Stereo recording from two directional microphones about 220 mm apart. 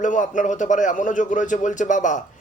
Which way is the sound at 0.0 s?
35° left (ahead or behind).